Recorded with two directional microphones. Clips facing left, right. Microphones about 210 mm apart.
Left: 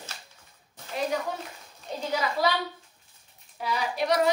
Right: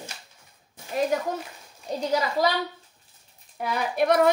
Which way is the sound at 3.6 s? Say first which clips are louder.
Right 4 dB; 55° right (ahead or behind).